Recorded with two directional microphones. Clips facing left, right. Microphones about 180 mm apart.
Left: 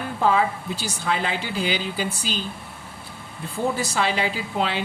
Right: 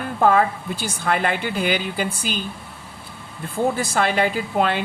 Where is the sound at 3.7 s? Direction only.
55° right (ahead or behind).